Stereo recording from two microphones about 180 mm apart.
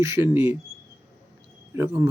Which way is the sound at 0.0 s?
15° right (ahead or behind).